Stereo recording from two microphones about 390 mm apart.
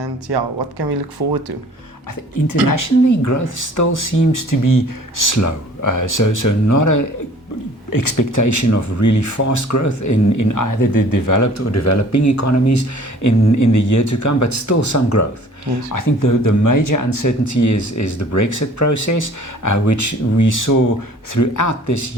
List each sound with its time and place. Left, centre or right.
0.0 s speech: right
2.6 s speech: left